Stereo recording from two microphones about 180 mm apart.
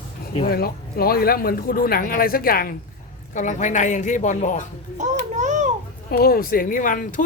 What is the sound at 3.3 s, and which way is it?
Speech, 45° left (ahead or behind).